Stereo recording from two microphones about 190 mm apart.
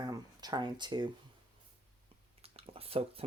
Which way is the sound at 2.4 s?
30° right (ahead or behind).